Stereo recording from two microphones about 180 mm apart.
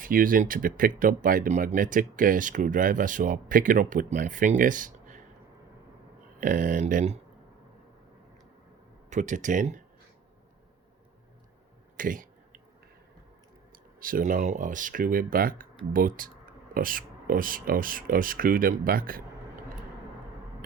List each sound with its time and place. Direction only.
0.0 s speech: 50° right (ahead or behind)
6.4 s speech: 50° right (ahead or behind)
9.0 s speech: 40° right (ahead or behind)
11.9 s speech: 50° right (ahead or behind)
14.0 s speech: 50° right (ahead or behind)